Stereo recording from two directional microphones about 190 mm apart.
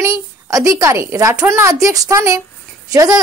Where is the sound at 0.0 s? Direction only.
15° right (ahead or behind).